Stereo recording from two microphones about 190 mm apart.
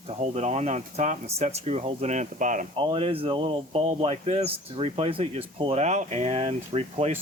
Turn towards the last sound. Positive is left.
turn(degrees=-30)  # may be behind; listen again after turning